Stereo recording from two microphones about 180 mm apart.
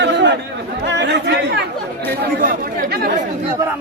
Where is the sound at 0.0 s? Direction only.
75° right (ahead or behind).